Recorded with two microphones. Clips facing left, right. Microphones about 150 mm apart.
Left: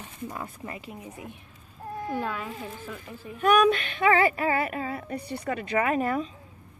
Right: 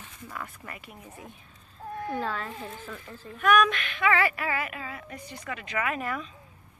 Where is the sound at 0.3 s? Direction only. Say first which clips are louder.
Even; 30° left (ahead or behind).